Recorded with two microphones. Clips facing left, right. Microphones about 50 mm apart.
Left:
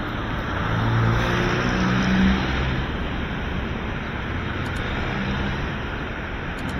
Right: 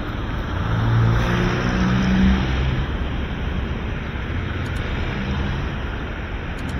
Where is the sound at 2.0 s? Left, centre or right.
Left.